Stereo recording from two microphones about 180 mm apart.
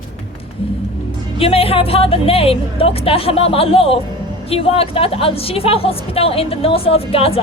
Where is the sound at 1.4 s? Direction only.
30° left (ahead or behind).